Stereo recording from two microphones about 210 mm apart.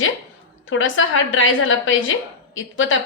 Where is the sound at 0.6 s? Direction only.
65° left (ahead or behind).